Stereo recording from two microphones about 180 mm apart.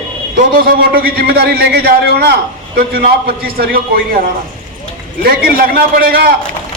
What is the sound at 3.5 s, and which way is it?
Speech, 55° right (ahead or behind).